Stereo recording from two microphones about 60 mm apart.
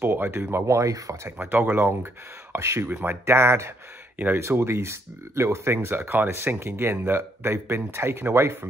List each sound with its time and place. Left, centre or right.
0.0 s speech: right
1.5 s speech: right
2.5 s speech: right
2.9 s speech: right
3.3 s speech: right